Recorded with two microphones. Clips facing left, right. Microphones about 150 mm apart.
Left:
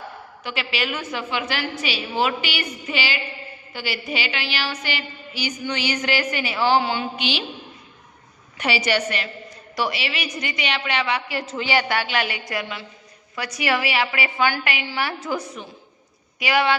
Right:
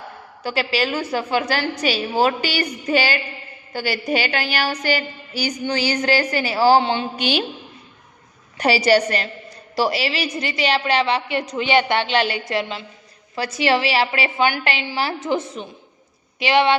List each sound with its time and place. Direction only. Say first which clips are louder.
0.4 s a woman's voice: right 6 dB; 35° right (ahead or behind)
7.2 s a woman's voice: right 5 dB; 45° right (ahead or behind)
8.5 s a woman's voice: right 6 dB; 35° right (ahead or behind)